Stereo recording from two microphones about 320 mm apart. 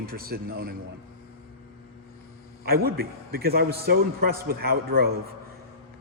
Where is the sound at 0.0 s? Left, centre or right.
Right.